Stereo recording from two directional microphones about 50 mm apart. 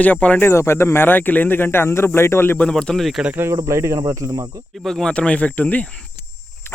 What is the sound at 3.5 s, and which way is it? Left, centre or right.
Speech, right.